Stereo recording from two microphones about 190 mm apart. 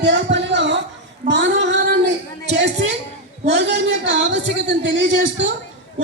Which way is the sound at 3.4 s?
65° right (ahead or behind).